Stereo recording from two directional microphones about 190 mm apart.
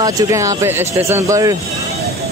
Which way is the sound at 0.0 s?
15° right (ahead or behind).